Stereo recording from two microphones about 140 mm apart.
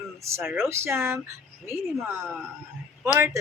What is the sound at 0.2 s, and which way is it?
Speech, 20° right (ahead or behind).